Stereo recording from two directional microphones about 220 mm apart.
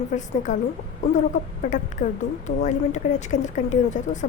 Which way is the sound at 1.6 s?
35° left (ahead or behind).